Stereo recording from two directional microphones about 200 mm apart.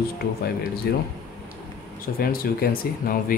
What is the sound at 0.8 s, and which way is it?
Speech, 50° left (ahead or behind).